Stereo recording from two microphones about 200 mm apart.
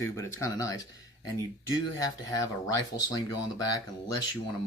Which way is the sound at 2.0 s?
20° left (ahead or behind).